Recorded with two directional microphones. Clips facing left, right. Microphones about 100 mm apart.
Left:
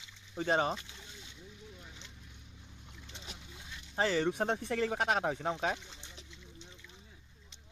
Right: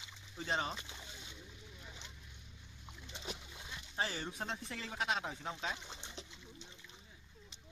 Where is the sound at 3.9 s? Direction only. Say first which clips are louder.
Left 10 dB; 65° left (ahead or behind).